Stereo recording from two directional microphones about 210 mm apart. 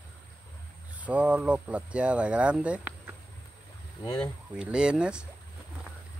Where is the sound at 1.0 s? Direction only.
5° right (ahead or behind).